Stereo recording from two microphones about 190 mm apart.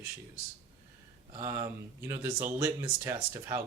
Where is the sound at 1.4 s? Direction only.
15° right (ahead or behind).